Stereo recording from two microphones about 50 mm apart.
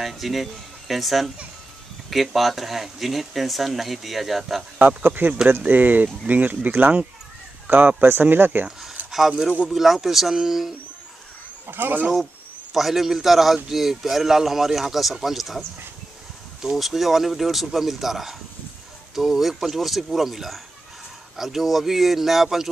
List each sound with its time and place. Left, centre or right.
0.0 s speech: centre
4.7 s speech: right
9.0 s a sound: right
9.7 s speech: centre
11.6 s speech: right
12.7 s speech: centre
16.6 s speech: centre